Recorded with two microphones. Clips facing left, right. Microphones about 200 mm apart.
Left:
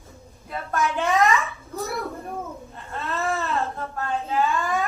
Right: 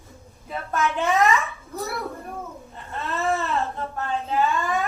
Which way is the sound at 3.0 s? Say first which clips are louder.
Right 2 dB; centre (ahead or behind).